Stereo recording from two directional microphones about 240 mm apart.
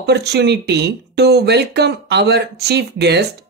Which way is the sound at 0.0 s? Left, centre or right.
Right.